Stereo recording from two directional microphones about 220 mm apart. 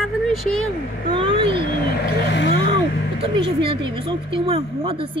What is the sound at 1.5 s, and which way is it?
Speech, 35° left (ahead or behind).